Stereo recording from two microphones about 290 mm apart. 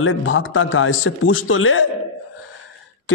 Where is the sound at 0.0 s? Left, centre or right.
Left.